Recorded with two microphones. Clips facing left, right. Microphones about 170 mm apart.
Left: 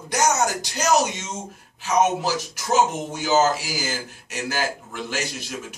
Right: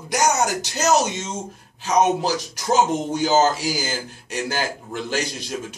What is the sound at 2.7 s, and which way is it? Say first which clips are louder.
Speech: right 2 dB; 30° right (ahead or behind).